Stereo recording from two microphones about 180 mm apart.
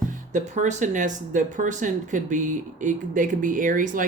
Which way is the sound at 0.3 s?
40° right (ahead or behind).